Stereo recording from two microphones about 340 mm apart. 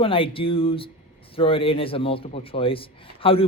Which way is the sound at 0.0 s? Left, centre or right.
Centre.